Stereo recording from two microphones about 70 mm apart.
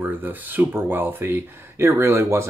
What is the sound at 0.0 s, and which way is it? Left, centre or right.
Speech, right.